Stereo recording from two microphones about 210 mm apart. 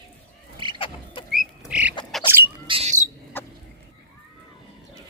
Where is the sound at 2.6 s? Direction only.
30° right (ahead or behind).